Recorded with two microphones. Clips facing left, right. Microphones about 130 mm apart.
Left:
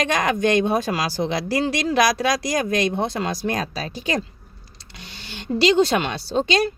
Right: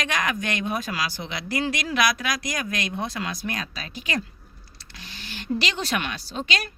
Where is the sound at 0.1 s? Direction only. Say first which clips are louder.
Left 8 dB; 30° left (ahead or behind).